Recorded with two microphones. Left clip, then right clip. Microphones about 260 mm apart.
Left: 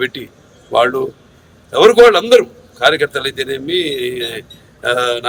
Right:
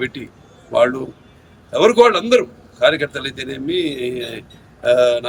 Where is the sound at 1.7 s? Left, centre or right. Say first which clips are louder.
Left 5 dB; centre.